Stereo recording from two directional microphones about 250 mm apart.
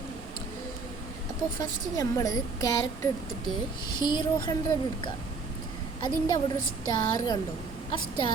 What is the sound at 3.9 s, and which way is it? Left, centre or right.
Speech, centre.